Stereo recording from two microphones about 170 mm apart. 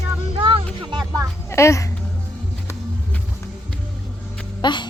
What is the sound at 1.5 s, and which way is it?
Speech, 15° left (ahead or behind).